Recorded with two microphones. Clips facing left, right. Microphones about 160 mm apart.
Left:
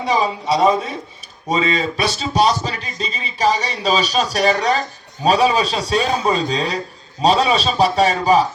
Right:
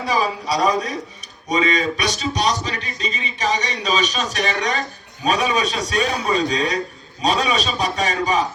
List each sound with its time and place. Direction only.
0.0 s a man's voice: 20° left (ahead or behind)